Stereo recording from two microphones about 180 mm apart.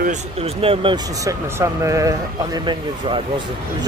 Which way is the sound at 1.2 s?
15° right (ahead or behind).